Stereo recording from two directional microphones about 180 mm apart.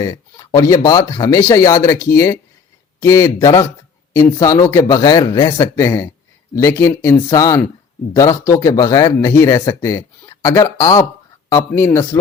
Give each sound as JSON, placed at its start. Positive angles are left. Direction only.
{"t": 0.0, "sound": "speech", "side_deg": 20}